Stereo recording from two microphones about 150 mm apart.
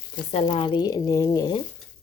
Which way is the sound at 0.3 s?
45° left (ahead or behind).